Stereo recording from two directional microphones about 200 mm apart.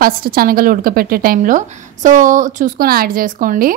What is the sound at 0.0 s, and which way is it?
Speech, 45° right (ahead or behind).